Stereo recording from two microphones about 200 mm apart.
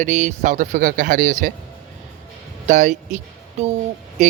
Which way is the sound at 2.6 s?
40° right (ahead or behind).